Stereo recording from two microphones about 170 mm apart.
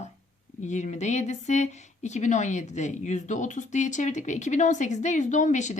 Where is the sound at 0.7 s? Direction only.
45° left (ahead or behind).